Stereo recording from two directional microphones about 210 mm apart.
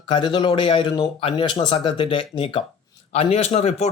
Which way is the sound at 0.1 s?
20° left (ahead or behind).